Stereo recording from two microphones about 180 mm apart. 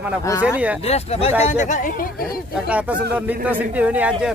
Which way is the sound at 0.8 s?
35° left (ahead or behind).